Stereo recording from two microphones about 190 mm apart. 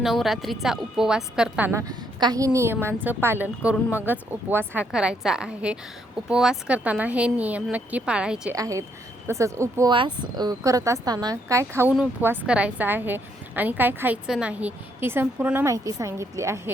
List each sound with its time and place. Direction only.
0.0 s a woman's voice: centre (ahead or behind)
8.5 s a woman's voice: 15° right (ahead or behind)